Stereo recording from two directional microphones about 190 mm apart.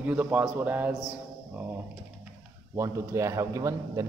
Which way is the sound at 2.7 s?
15° right (ahead or behind).